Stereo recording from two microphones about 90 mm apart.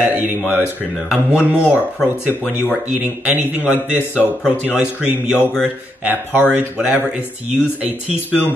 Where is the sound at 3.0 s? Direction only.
20° right (ahead or behind).